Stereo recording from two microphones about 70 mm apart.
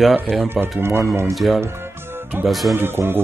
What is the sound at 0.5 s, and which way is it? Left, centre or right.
Speech, right.